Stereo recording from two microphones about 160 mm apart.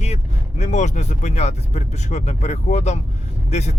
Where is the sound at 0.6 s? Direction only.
45° left (ahead or behind).